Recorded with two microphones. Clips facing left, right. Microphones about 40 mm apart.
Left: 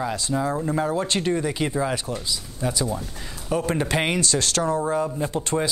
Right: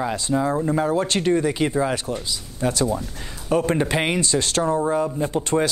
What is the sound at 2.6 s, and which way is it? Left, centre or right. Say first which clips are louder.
Speech: right 4 dB; right.